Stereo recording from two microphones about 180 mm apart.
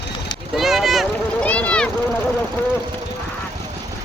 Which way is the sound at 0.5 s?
Centre (ahead or behind).